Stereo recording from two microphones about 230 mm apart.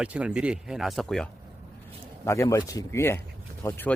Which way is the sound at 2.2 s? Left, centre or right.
Centre.